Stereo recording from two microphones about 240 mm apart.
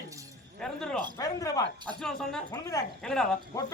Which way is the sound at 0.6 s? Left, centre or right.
Centre.